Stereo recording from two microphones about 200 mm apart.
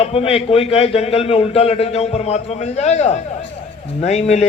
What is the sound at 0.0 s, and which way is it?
A man's voice, 30° left (ahead or behind).